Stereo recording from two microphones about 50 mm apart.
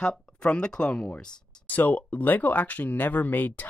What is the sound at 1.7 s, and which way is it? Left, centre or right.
Speech, left.